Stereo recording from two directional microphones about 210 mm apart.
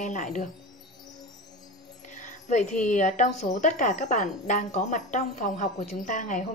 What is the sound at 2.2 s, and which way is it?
A woman's voice, 35° left (ahead or behind).